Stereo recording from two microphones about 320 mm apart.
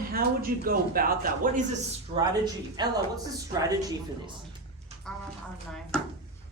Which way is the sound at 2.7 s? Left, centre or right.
Centre.